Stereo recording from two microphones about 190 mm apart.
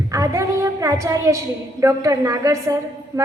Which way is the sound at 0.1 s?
15° right (ahead or behind).